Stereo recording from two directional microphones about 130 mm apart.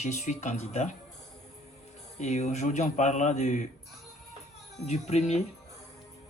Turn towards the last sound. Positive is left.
turn(degrees=60)  # may be behind; listen again after turning